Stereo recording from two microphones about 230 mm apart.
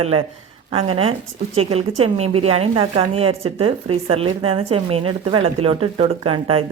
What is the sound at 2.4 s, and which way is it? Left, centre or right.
Speech, right.